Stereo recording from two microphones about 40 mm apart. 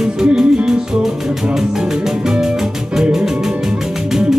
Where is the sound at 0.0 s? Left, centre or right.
Centre.